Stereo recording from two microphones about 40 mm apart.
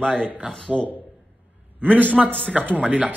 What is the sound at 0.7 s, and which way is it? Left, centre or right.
Speech, centre.